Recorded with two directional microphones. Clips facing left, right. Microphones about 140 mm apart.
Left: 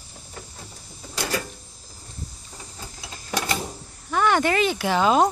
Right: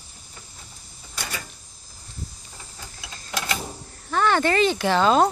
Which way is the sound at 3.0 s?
35° left (ahead or behind).